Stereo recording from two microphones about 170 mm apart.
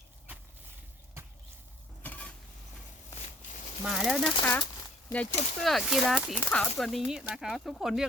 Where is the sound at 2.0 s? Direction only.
10° left (ahead or behind).